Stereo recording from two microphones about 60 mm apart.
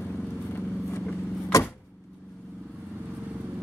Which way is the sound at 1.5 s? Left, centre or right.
Left.